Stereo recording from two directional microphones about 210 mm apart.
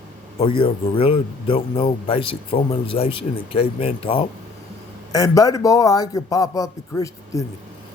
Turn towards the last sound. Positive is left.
turn(degrees=15)  # may be behind; listen again after turning